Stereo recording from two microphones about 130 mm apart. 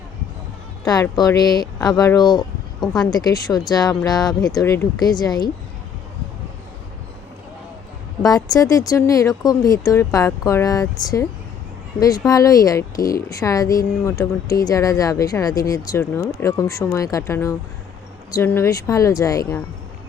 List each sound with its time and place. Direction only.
1.3 s speech: 30° left (ahead or behind)
4.6 s a woman's voice: 20° left (ahead or behind)
4.9 s speech: 30° left (ahead or behind)
8.2 s a woman's voice: 30° left (ahead or behind)